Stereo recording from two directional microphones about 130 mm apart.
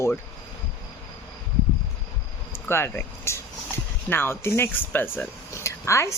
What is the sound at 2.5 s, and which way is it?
Speech, 20° left (ahead or behind).